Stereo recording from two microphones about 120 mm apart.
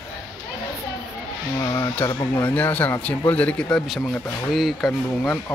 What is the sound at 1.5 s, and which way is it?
Speech, 30° left (ahead or behind).